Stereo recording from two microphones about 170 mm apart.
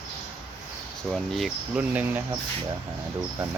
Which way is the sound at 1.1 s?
Centre (ahead or behind).